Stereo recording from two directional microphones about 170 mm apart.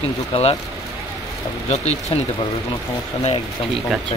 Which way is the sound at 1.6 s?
40° left (ahead or behind).